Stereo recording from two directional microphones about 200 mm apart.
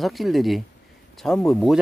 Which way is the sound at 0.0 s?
Centre (ahead or behind).